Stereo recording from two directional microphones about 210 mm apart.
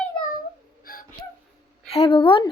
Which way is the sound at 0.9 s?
45° left (ahead or behind).